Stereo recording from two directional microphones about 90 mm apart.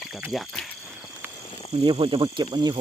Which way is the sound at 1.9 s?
90° right.